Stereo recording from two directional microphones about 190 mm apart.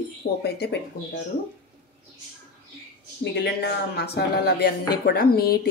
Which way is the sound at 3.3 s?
60° left (ahead or behind).